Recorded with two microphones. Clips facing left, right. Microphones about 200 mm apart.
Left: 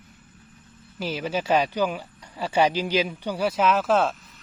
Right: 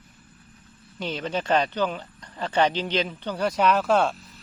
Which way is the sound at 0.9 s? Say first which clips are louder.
Left 1 dB; 5° left (ahead or behind).